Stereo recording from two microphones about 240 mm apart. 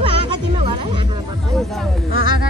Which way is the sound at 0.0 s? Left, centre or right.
Right.